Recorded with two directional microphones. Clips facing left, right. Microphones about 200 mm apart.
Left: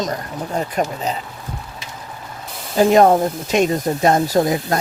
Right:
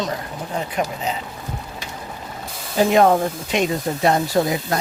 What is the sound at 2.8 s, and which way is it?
Speech, 45° left (ahead or behind).